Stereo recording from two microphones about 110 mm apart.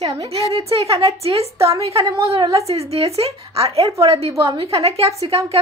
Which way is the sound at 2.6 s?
65° right (ahead or behind).